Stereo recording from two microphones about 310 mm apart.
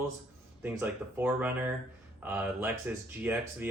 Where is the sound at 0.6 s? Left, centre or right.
Centre.